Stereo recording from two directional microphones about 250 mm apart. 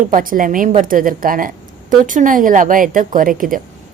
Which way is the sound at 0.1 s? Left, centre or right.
Right.